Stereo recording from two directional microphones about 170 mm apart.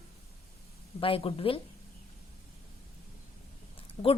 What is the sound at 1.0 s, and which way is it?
Speech, 35° left (ahead or behind).